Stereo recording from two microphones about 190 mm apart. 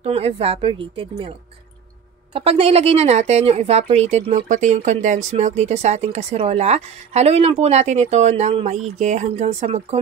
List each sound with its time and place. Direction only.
0.0 s a woman's voice: 30° right (ahead or behind)
2.3 s a woman's voice: 30° right (ahead or behind)